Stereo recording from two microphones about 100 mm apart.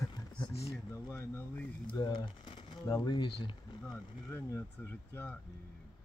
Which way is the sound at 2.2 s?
55° left (ahead or behind).